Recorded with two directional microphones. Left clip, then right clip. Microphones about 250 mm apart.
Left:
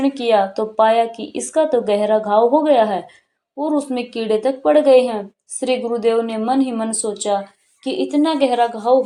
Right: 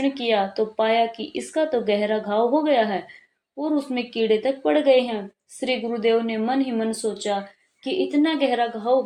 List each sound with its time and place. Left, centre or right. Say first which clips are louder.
0.0 s a woman's voice: left 6 dB; centre